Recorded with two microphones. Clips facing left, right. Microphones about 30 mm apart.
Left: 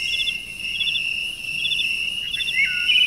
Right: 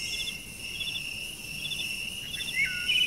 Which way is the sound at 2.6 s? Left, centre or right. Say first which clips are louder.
Left 8 dB; left.